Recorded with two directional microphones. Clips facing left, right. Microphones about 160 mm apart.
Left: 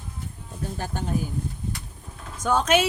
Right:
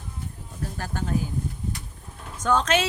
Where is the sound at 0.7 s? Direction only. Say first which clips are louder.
Even; 20° left (ahead or behind).